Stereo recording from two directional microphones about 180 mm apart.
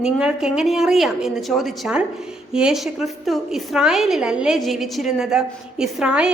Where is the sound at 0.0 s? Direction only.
5° right (ahead or behind).